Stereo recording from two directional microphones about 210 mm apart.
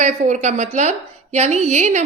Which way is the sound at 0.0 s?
35° right (ahead or behind).